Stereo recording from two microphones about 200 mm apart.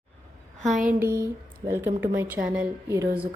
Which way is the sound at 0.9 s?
10° right (ahead or behind).